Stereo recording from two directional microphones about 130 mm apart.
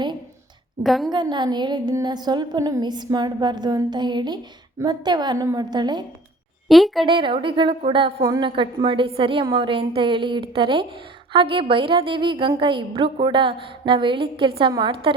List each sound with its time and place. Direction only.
0.8 s a woman's voice: centre (ahead or behind)
1.1 s a woman's voice: 35° right (ahead or behind)
6.7 s a woman's voice: centre (ahead or behind)
7.0 s a woman's voice: 40° right (ahead or behind)